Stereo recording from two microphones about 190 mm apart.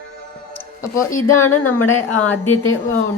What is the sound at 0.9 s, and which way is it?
A woman's voice, 15° left (ahead or behind).